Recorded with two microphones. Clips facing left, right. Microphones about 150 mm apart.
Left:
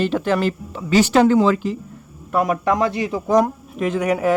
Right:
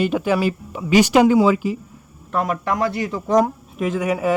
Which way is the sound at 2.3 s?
15° left (ahead or behind).